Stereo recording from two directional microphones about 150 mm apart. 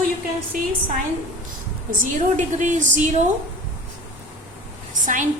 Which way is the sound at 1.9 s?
60° right (ahead or behind).